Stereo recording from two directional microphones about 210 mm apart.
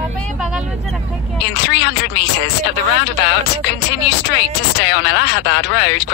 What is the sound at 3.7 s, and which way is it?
Speech, 55° left (ahead or behind).